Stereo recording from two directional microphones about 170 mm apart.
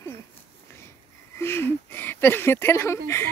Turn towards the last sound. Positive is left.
turn(degrees=15)  # may be behind; listen again after turning